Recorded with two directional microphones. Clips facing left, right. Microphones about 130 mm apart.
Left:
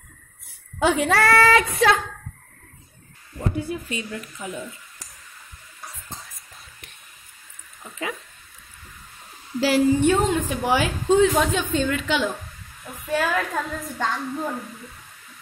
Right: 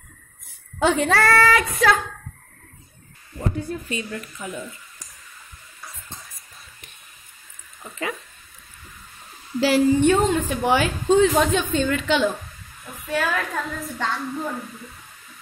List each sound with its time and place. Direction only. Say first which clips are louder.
0.7 s a woman's voice: even; 10° left (ahead or behind); by 1.9 s 25° left (ahead or behind)
3.3 s a woman's voice: even; 5° left (ahead or behind)
9.6 s a woman's voice: right 1 dB; 5° left (ahead or behind)
13.1 s a woman's voice: left 1 dB; 15° left (ahead or behind)